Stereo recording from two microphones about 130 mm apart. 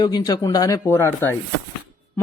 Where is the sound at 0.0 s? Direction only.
30° left (ahead or behind).